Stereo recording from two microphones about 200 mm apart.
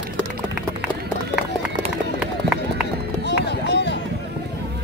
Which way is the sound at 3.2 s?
60° left (ahead or behind).